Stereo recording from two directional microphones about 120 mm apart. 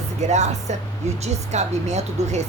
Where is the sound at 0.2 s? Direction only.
70° right (ahead or behind).